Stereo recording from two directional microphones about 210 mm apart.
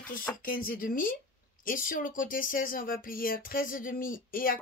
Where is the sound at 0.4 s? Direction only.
40° left (ahead or behind).